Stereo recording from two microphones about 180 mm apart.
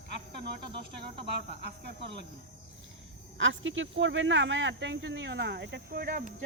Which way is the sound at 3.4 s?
90° right.